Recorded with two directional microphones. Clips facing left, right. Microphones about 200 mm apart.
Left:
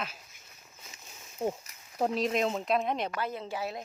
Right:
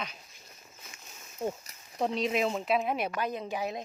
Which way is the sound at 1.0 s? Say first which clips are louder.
Left 2 dB; 10° left (ahead or behind).